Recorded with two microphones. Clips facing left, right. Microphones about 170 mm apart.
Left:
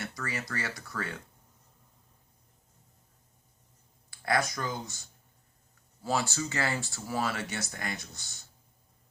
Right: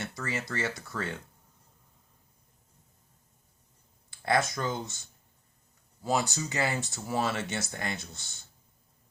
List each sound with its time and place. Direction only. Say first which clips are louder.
0.0 s speech: right 2 dB; 25° right (ahead or behind)
4.1 s speech: right 2 dB; 25° right (ahead or behind)